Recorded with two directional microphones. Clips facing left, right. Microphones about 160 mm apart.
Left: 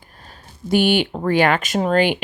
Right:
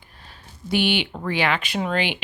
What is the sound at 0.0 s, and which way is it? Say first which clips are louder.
Speech: left 3 dB; 45° left (ahead or behind).